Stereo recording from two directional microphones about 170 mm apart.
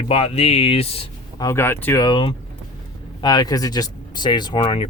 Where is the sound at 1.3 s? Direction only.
20° left (ahead or behind).